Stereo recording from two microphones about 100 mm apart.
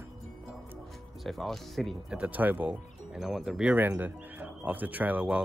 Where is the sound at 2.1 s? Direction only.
15° right (ahead or behind).